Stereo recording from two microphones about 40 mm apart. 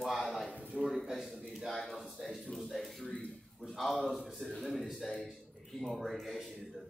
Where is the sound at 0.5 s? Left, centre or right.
Right.